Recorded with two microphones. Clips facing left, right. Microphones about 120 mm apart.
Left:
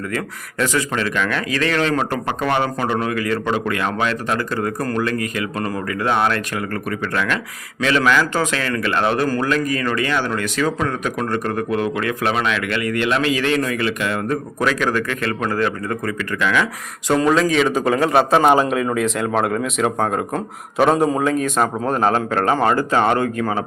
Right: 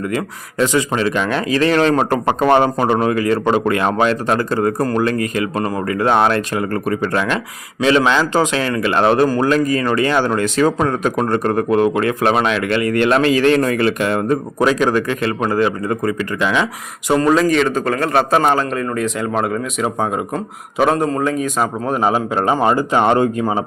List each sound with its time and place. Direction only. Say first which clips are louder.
0.6 s a man's voice: right 4 dB; 20° right (ahead or behind); by 14.2 s 40° right (ahead or behind)
14.3 s a man's voice: right 5 dB; 25° right (ahead or behind)
17.2 s a man's voice: right 2 dB; centre (ahead or behind); by 23.6 s 20° right (ahead or behind)